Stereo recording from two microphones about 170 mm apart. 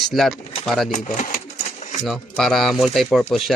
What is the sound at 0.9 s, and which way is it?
Pigeon, 45° left (ahead or behind).